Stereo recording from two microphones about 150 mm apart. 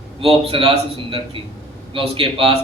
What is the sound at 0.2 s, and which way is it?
A man's voice, 40° right (ahead or behind).